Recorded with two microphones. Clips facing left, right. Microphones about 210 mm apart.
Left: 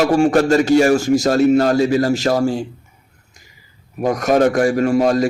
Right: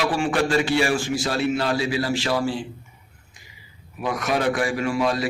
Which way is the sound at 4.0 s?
40° left (ahead or behind).